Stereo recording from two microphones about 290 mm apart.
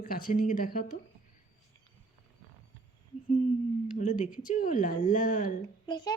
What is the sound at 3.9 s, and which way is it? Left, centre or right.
Speech, left.